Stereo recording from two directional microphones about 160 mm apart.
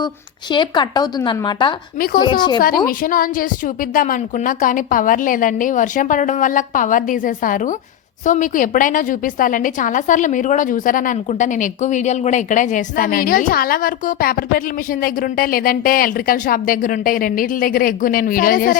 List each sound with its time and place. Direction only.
0.5 s speech: 30° left (ahead or behind)
2.6 s a woman's voice: 65° left (ahead or behind)